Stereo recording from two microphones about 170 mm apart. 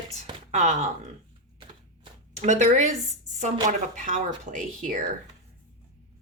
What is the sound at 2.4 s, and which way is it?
A woman's voice, 45° right (ahead or behind).